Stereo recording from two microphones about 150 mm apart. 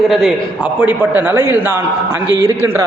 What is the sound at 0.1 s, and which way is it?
A man's voice, 5° right (ahead or behind).